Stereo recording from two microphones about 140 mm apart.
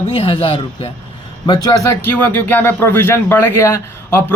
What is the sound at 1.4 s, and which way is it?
A man's voice, 30° left (ahead or behind).